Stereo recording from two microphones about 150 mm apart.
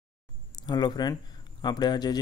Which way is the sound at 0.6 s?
30° left (ahead or behind).